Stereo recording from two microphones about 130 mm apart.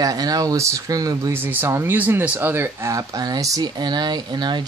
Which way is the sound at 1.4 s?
15° right (ahead or behind).